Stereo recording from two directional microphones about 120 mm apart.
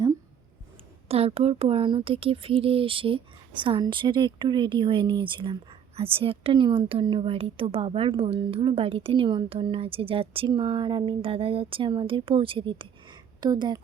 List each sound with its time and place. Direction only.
1.0 s a woman's voice: 55° right (ahead or behind); by 13.8 s 35° right (ahead or behind)